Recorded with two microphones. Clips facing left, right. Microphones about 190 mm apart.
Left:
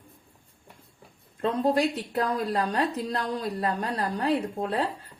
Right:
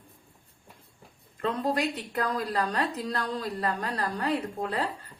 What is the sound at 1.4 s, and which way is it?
A woman's voice, 25° left (ahead or behind).